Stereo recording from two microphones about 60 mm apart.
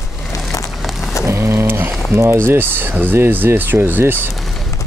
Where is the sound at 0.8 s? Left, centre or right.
Centre.